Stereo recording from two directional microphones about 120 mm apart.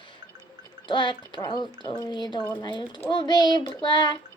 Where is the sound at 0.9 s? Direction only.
40° left (ahead or behind).